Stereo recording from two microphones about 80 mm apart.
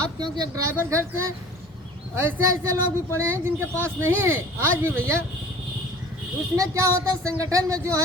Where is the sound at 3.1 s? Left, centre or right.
Right.